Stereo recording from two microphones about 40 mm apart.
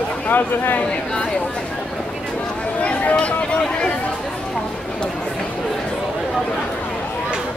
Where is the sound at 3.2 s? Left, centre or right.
Left.